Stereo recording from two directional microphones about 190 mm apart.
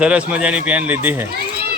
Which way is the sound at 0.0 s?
5° right (ahead or behind).